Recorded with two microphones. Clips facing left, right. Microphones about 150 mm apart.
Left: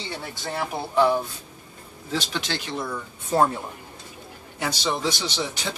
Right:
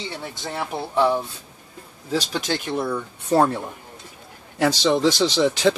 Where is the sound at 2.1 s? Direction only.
40° right (ahead or behind).